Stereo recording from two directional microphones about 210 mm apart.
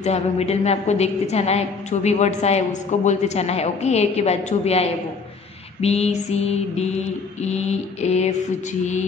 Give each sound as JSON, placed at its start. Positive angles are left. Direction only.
{"t": 0.0, "sound": "a woman's voice", "side_deg": 30}
{"t": 5.8, "sound": "mantra", "side_deg": 30}
{"t": 7.4, "sound": "a woman's voice", "side_deg": 30}